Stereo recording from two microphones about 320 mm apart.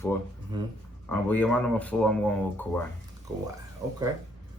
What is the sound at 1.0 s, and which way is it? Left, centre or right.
Speech, centre.